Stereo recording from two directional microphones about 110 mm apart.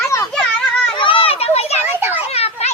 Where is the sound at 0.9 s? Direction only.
50° left (ahead or behind); by 2.7 s 75° left (ahead or behind).